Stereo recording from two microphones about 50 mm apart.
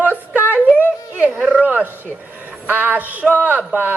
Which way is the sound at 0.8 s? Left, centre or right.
Right.